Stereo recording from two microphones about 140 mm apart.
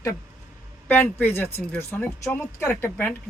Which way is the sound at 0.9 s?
15° left (ahead or behind).